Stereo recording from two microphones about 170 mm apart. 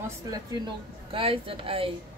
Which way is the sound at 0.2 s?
20° right (ahead or behind).